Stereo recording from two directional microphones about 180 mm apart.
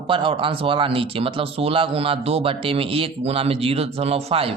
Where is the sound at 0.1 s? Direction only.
30° right (ahead or behind).